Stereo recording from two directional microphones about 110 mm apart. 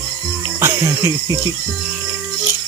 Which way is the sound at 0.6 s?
25° right (ahead or behind).